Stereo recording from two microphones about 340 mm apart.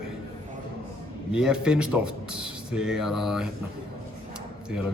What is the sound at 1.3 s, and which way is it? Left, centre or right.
Speech, centre.